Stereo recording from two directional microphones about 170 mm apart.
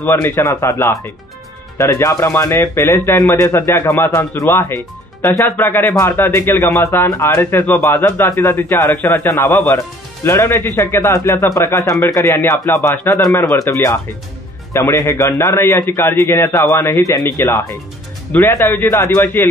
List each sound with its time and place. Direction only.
0.0 s speech: 15° left (ahead or behind)